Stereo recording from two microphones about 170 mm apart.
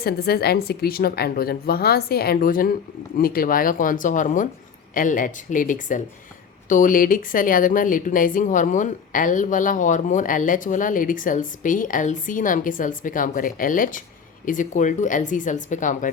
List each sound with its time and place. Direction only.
0.0 s a woman's voice: 65° left (ahead or behind); by 16.1 s 50° left (ahead or behind)